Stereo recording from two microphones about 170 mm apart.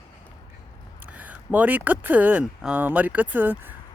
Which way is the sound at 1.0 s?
10° right (ahead or behind).